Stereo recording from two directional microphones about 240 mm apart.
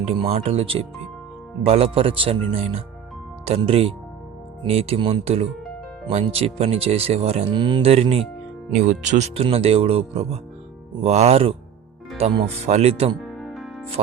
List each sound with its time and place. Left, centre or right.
0.0 s speech: right
13.3 s music: centre